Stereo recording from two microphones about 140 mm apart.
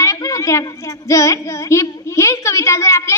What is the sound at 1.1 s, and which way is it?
Speech, 20° left (ahead or behind).